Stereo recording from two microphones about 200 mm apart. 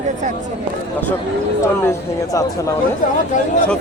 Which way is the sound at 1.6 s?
15° left (ahead or behind).